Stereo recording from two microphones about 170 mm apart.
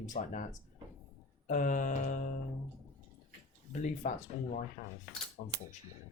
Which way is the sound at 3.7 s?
45° left (ahead or behind).